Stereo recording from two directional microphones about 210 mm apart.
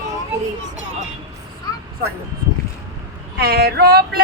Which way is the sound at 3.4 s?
50° right (ahead or behind).